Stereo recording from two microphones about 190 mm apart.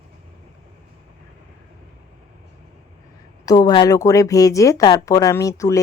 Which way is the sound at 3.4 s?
20° left (ahead or behind).